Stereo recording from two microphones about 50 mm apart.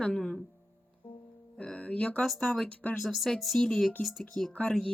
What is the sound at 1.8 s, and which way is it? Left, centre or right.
Speech, left.